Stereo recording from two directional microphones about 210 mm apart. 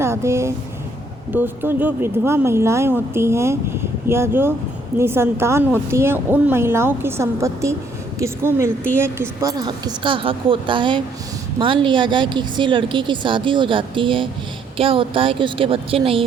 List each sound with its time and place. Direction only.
0.0 s a woman's voice: 15° right (ahead or behind)